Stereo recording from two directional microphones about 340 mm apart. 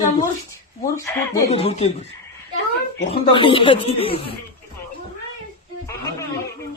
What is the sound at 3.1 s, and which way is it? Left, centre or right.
Speech, centre.